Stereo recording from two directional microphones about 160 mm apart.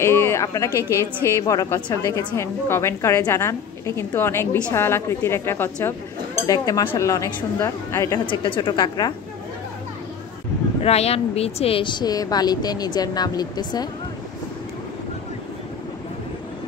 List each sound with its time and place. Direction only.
0.0 s a woman's voice: 15° left (ahead or behind)
8.3 s speech: 30° left (ahead or behind)
10.8 s speech: 40° left (ahead or behind); by 13.8 s 25° left (ahead or behind)